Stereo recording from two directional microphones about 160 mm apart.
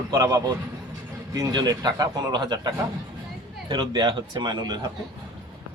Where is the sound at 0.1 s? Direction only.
20° right (ahead or behind).